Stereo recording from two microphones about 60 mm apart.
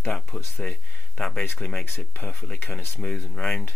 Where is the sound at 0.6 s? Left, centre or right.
Centre.